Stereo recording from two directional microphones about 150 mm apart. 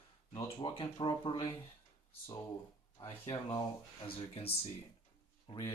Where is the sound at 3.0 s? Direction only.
25° left (ahead or behind).